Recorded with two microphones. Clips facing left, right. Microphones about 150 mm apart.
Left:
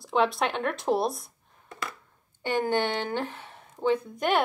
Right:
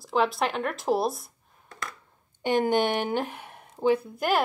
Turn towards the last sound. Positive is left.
turn(degrees=-5)  # may be behind; listen again after turning